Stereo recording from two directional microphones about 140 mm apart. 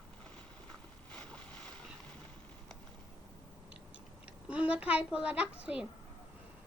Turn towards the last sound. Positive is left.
turn(degrees=-10)  # may be behind; listen again after turning